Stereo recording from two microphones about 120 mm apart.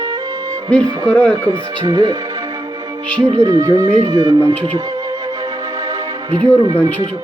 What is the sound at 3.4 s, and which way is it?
Music, 25° right (ahead or behind).